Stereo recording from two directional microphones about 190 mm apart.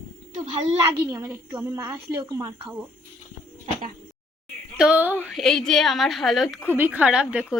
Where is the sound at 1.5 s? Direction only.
15° right (ahead or behind).